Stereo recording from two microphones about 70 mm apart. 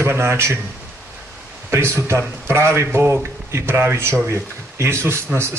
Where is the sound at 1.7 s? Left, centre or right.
Right.